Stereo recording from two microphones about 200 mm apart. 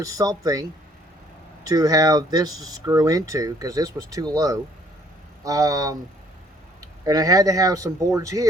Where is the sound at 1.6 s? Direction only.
15° right (ahead or behind).